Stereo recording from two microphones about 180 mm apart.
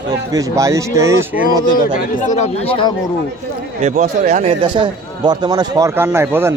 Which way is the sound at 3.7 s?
40° right (ahead or behind).